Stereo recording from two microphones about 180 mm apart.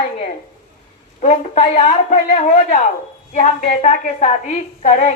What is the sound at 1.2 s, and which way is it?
A woman's voice, 40° left (ahead or behind).